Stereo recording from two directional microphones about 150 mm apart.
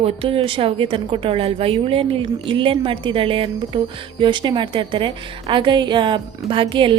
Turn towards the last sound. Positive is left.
turn(degrees=-35)  # may be behind; listen again after turning